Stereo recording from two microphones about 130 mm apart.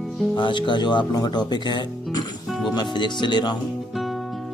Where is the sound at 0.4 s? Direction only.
40° left (ahead or behind).